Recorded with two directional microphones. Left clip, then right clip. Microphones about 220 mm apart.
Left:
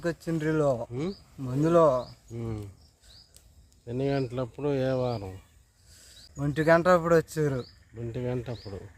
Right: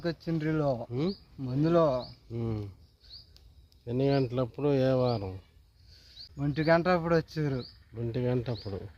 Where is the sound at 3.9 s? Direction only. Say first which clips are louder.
Right 1 dB; 25° right (ahead or behind).